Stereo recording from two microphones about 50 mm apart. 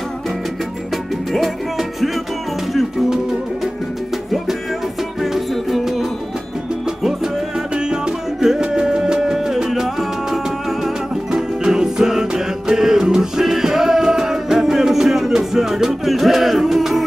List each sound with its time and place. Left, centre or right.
1.3 s music: centre
5.2 s music: centre
7.7 s music: centre